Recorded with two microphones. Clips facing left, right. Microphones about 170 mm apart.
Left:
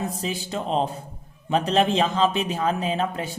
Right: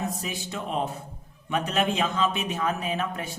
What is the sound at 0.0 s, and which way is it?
A man's voice, 30° left (ahead or behind).